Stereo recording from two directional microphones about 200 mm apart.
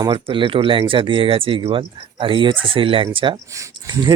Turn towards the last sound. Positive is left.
turn(degrees=-15)  # may be behind; listen again after turning